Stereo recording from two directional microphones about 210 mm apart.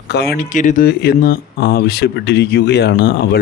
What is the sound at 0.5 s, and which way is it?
Speech, 35° left (ahead or behind).